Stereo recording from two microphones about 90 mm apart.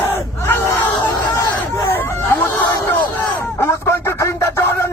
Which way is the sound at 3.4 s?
30° left (ahead or behind).